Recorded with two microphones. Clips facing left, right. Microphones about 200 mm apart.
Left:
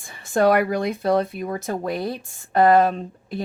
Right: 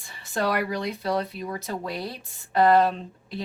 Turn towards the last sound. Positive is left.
turn(degrees=50)  # may be behind; listen again after turning